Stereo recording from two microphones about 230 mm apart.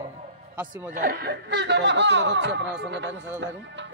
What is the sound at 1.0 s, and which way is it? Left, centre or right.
Speech, right.